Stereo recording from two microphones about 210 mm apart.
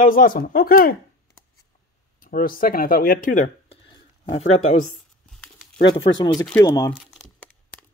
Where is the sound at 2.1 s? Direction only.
40° left (ahead or behind).